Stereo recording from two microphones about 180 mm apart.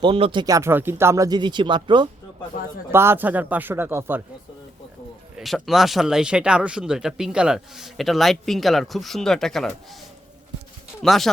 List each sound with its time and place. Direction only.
0.0 s speech: 30° right (ahead or behind)
2.9 s speech: 15° right (ahead or behind)
5.4 s speech: centre (ahead or behind)